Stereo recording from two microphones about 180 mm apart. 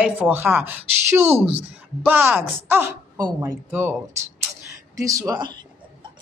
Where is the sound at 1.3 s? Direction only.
30° right (ahead or behind).